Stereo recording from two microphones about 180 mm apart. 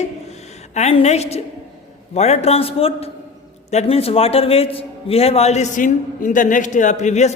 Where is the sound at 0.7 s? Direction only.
40° left (ahead or behind).